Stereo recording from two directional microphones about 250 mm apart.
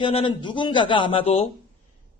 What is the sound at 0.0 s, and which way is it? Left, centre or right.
A man's voice, left.